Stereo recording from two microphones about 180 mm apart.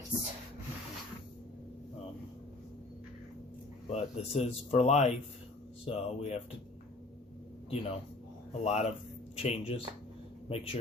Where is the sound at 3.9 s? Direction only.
35° left (ahead or behind).